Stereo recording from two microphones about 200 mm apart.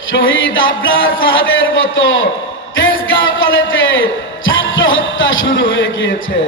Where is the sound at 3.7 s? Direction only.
75° left (ahead or behind).